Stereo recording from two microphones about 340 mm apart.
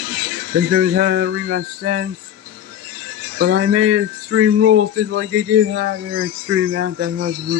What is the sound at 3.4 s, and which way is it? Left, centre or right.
Speech, right.